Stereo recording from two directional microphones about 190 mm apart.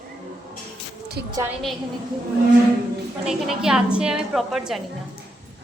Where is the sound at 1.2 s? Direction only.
60° right (ahead or behind).